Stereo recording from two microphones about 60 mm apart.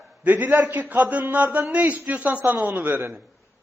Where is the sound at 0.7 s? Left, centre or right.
Right.